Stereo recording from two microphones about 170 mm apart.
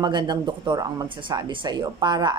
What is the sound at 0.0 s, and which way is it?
Speech, 25° right (ahead or behind).